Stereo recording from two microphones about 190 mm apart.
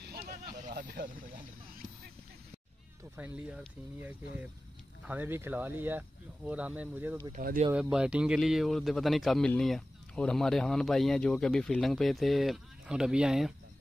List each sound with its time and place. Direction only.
0.0 s a sound: 50° right (ahead or behind)
3.2 s speech: 10° right (ahead or behind)
7.3 s speech: 45° right (ahead or behind)
7.7 s speech: 5° right (ahead or behind)